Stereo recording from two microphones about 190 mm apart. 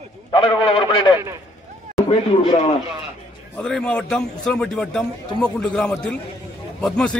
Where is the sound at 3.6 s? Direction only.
5° left (ahead or behind).